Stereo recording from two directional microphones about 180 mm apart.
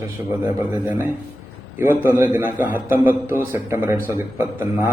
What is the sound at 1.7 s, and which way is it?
A man's voice, 10° right (ahead or behind).